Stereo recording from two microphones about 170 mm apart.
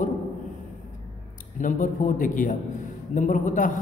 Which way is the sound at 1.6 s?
50° left (ahead or behind).